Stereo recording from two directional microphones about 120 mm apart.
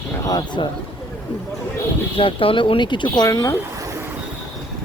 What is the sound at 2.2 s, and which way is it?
Speech, 45° left (ahead or behind).